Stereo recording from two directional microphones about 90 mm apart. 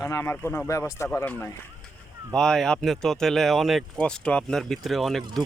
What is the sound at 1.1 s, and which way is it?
Speech, 20° left (ahead or behind).